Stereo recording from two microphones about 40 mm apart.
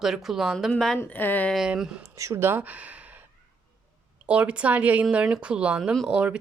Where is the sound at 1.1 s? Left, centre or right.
Left.